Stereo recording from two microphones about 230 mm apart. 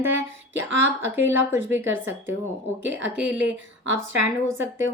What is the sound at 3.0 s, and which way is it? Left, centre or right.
Speech, right.